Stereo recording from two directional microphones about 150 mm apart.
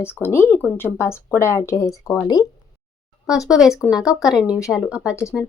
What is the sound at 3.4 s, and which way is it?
Speech, 5° right (ahead or behind).